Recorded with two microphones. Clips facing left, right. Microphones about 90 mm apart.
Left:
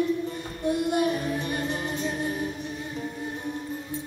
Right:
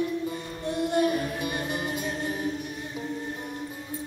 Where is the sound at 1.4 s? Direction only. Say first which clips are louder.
Left 1 dB; 10° right (ahead or behind).